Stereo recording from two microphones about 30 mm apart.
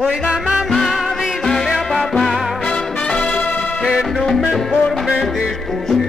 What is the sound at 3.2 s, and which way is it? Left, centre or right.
Music, left.